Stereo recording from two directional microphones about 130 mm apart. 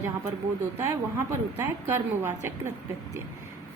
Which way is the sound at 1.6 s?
20° right (ahead or behind).